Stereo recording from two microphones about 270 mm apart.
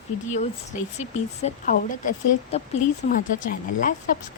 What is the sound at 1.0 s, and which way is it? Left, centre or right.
Speech, left.